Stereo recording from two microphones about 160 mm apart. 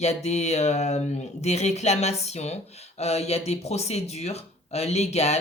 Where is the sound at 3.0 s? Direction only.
40° left (ahead or behind).